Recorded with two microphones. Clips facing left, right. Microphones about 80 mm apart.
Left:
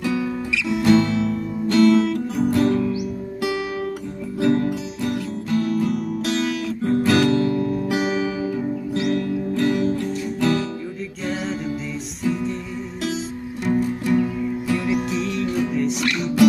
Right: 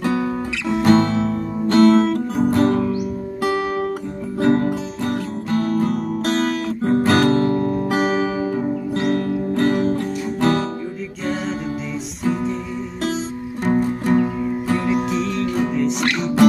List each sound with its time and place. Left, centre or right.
0.0 s guitar: right
3.4 s music: right
13.7 s music: right
15.0 s music: centre
16.0 s music: right